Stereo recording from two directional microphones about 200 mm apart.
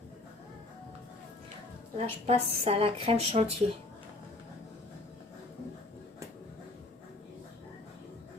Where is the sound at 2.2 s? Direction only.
30° right (ahead or behind).